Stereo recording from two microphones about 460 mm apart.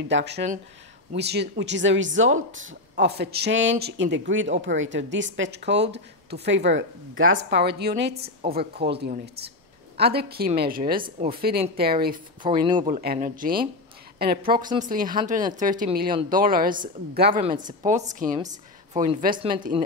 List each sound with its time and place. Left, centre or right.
0.1 s a woman's voice: right
14.6 s speech: centre